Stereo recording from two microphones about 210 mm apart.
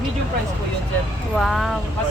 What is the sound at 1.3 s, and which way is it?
Speech, centre (ahead or behind).